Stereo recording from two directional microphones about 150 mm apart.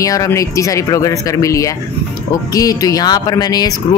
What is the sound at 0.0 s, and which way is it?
Speech, 20° left (ahead or behind).